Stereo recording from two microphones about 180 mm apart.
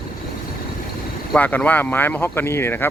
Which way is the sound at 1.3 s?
10° left (ahead or behind).